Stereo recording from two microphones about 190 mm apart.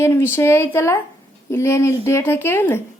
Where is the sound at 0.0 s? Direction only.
15° left (ahead or behind).